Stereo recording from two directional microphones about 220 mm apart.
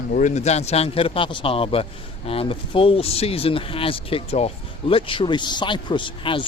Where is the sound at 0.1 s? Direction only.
35° left (ahead or behind).